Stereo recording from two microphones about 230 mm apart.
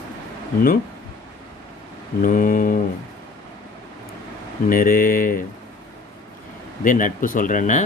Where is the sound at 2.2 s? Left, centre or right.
Left.